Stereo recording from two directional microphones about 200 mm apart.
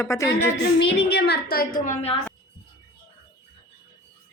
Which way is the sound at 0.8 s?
55° left (ahead or behind).